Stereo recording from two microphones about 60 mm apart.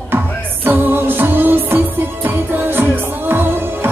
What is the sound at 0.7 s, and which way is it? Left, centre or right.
Music, right.